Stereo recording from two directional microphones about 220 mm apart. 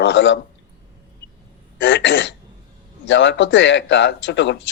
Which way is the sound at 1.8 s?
55° left (ahead or behind).